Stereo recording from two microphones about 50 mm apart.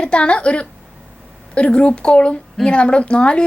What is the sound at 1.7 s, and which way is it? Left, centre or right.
A woman's voice, centre.